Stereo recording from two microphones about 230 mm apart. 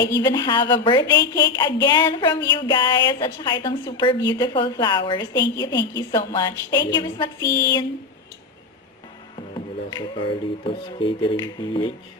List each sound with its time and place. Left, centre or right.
0.2 s a woman's voice: centre
9.6 s speech: left